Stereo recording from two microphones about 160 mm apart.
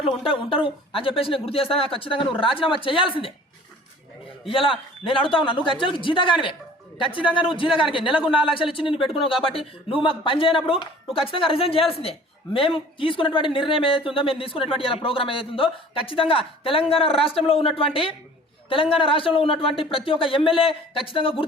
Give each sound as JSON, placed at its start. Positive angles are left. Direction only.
{"t": 0.2, "sound": "a woman's voice", "side_deg": 35}
{"t": 4.4, "sound": "a woman's voice", "side_deg": 35}
{"t": 8.2, "sound": "speech", "side_deg": -5}
{"t": 8.5, "sound": "a woman's voice", "side_deg": 35}